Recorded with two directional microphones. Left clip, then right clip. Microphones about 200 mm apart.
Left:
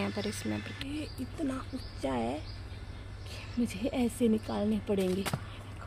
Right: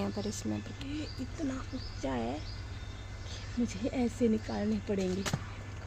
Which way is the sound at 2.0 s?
15° left (ahead or behind).